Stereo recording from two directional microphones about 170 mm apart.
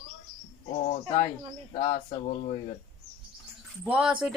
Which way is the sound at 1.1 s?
20° left (ahead or behind).